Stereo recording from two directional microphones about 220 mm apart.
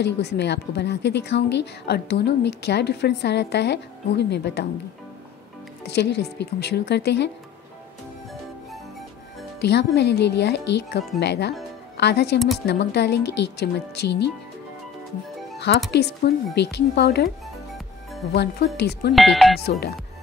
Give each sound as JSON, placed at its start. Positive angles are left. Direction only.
{"t": 0.0, "sound": "a woman's voice", "side_deg": 50}
{"t": 5.9, "sound": "a woman's voice", "side_deg": 50}
{"t": 9.6, "sound": "a woman's voice", "side_deg": 50}
{"t": 15.9, "sound": "a woman's voice", "side_deg": 50}
{"t": 18.3, "sound": "a woman's voice", "side_deg": 50}
{"t": 19.1, "sound": "speech", "side_deg": 0}